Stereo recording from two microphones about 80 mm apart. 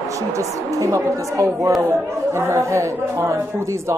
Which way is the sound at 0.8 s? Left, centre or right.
Right.